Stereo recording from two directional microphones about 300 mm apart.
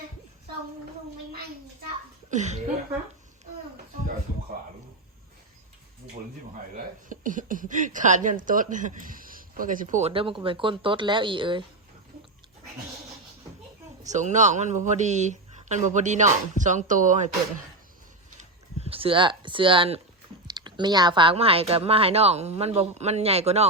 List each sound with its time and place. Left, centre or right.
2.3 s speech: right
7.1 s speech: right
14.0 s speech: right
18.9 s speech: centre